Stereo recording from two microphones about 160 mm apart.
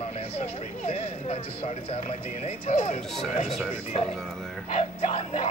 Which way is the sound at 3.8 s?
40° left (ahead or behind).